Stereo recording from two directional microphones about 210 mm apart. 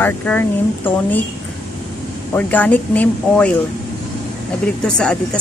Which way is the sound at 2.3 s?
10° left (ahead or behind).